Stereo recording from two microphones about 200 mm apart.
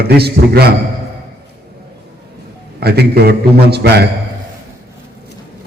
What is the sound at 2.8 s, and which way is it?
A man's voice, 55° right (ahead or behind).